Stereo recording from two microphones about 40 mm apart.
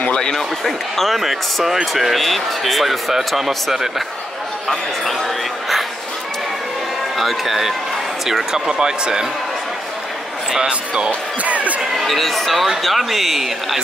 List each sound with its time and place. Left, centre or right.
0.3 s speech: centre
7.2 s speech: centre
11.1 s speech: right
12.0 s speech: centre